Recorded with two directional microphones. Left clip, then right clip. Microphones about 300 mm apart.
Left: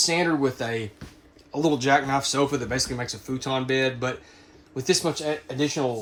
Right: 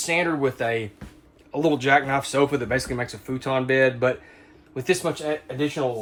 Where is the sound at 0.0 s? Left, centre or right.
Centre.